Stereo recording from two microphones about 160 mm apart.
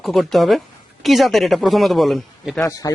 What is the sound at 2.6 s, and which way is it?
Speech, 20° left (ahead or behind).